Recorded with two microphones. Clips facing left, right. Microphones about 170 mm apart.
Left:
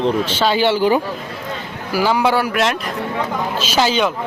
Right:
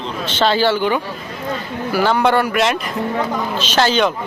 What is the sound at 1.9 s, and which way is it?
A man's voice, 5° left (ahead or behind).